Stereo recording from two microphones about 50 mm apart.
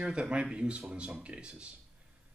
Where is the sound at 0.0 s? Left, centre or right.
Centre.